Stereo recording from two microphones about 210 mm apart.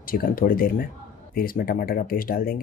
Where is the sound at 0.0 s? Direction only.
45° left (ahead or behind).